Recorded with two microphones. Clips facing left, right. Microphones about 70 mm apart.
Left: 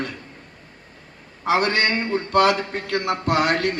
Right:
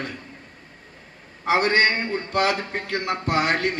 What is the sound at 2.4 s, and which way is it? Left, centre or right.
Speech, left.